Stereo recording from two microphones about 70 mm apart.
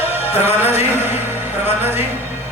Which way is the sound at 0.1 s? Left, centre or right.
Right.